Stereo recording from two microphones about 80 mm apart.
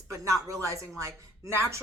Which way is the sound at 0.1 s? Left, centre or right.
Right.